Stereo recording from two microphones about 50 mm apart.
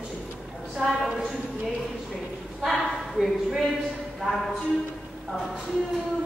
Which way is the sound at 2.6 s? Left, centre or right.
Centre.